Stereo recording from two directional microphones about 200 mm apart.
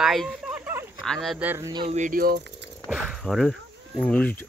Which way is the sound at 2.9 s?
5° right (ahead or behind).